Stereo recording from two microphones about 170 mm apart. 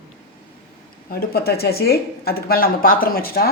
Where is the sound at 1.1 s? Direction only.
65° left (ahead or behind).